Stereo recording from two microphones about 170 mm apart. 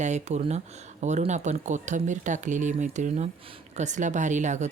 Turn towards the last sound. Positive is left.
turn(degrees=-45)  # may be behind; listen again after turning